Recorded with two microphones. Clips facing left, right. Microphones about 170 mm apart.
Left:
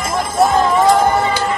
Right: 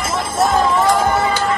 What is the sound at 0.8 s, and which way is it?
Music, 20° left (ahead or behind).